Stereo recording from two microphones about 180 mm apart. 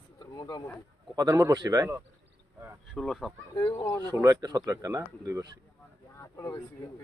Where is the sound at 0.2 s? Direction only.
20° left (ahead or behind).